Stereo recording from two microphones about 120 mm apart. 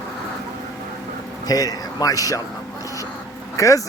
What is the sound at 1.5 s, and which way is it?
Speech, 30° left (ahead or behind).